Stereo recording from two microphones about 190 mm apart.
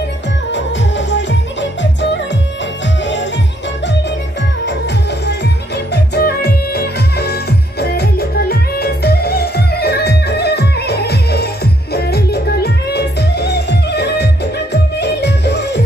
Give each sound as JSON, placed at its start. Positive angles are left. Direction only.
{"t": 0.5, "sound": "music", "side_deg": 70}
{"t": 4.6, "sound": "music", "side_deg": 65}